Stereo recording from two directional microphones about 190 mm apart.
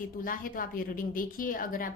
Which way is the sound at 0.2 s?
45° left (ahead or behind).